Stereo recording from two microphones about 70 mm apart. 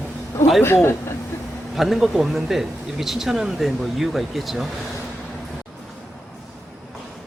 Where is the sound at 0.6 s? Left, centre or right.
Left.